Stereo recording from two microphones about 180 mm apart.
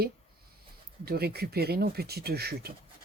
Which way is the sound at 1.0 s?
60° right (ahead or behind).